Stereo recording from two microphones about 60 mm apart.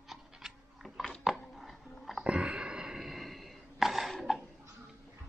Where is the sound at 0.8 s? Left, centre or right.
Centre.